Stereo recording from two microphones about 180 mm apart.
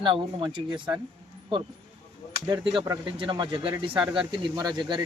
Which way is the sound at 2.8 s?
30° right (ahead or behind).